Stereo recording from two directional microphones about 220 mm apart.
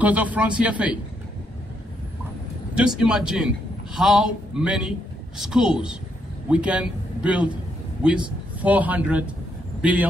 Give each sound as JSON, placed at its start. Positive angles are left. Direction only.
{"t": 0.0, "sound": "a man's voice", "side_deg": -5}
{"t": 2.7, "sound": "a man's voice", "side_deg": -5}
{"t": 8.5, "sound": "speech", "side_deg": -5}